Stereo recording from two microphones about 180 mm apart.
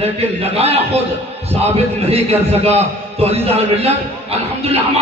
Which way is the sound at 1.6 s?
35° right (ahead or behind).